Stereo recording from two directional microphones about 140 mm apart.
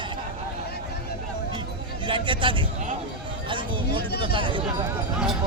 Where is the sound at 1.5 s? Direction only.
35° right (ahead or behind).